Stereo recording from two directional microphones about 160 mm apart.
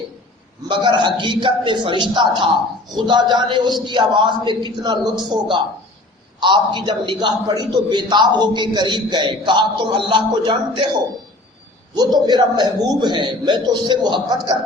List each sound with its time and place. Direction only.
0.7 s a man's voice: 30° right (ahead or behind)
11.9 s a man's voice: 25° right (ahead or behind)